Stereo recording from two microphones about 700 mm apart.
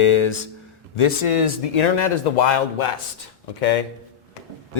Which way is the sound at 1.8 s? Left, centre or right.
Left.